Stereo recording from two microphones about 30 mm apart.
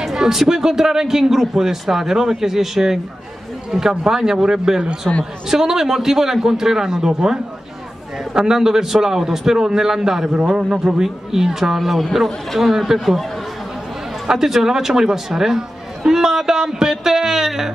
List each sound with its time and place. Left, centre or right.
0.0 s a man's voice: centre
5.1 s a woman's voice: centre
5.5 s a man's voice: centre
8.4 s a man's voice: centre
14.4 s a man's voice: centre